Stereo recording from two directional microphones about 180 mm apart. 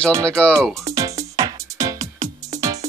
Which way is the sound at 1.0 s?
20° right (ahead or behind).